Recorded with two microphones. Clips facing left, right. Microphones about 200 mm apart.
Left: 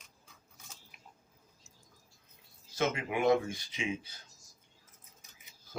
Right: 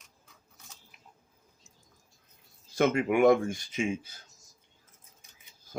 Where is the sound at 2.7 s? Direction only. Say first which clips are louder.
Right 8 dB; 50° right (ahead or behind).